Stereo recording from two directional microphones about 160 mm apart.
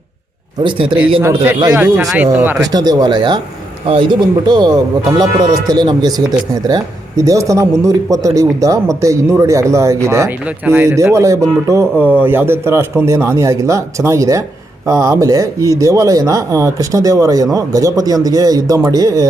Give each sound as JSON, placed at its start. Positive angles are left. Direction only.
{"t": 0.6, "sound": "speech", "side_deg": -30}
{"t": 1.7, "sound": "speech", "side_deg": -10}
{"t": 2.7, "sound": "speech", "side_deg": -25}